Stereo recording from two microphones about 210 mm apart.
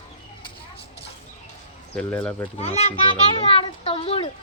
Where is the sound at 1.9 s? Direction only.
5° left (ahead or behind).